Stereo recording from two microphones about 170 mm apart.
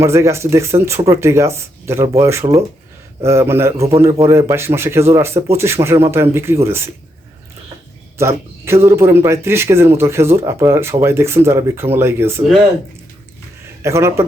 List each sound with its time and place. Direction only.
0.0 s speech: 15° right (ahead or behind)
8.2 s speech: 15° right (ahead or behind)
13.8 s speech: 15° right (ahead or behind)